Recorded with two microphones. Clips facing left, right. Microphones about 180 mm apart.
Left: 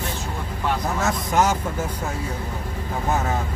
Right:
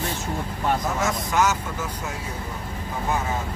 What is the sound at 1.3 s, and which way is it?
Speech, 50° left (ahead or behind).